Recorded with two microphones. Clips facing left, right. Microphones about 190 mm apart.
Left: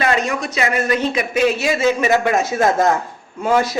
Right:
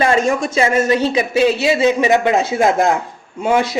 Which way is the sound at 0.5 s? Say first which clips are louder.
Right 3 dB; 25° right (ahead or behind).